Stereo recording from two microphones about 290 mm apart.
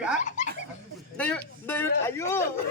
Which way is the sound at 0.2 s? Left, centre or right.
Left.